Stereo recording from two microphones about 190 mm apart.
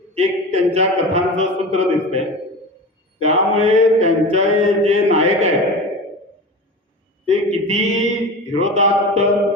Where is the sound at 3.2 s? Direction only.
35° right (ahead or behind).